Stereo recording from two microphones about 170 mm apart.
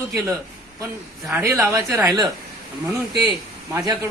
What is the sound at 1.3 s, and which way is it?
Speech, 15° right (ahead or behind).